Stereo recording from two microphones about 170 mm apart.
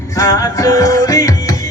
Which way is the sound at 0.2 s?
20° left (ahead or behind).